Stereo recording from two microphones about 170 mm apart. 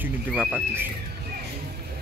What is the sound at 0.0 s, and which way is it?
Speech, 5° right (ahead or behind).